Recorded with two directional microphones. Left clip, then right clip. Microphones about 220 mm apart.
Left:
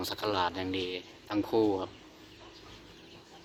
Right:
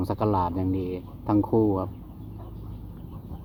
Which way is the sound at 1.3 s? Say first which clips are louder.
Right 5 dB; 20° left (ahead or behind).